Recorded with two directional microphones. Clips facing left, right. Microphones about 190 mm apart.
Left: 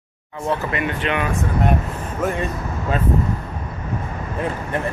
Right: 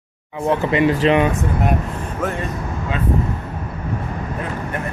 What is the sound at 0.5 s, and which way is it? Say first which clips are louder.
Speech: right 6 dB; 25° right (ahead or behind).